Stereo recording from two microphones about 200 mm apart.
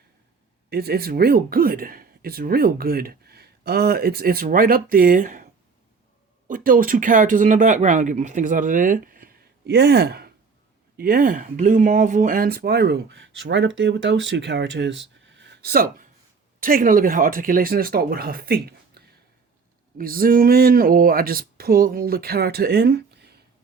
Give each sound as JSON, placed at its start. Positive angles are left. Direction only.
{"t": 0.7, "sound": "speech", "side_deg": -50}
{"t": 6.5, "sound": "speech", "side_deg": -45}